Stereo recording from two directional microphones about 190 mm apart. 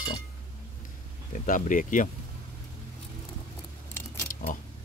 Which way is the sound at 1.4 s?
45° left (ahead or behind).